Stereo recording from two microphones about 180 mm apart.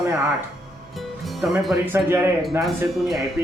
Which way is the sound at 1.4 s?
Centre (ahead or behind).